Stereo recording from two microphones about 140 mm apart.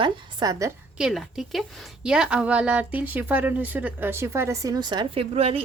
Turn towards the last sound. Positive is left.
turn(degrees=-45)  # may be behind; listen again after turning